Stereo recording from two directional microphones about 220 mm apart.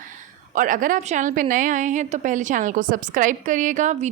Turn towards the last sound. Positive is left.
turn(degrees=-35)  # may be behind; listen again after turning